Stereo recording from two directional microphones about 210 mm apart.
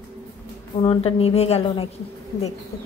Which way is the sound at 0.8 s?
25° left (ahead or behind).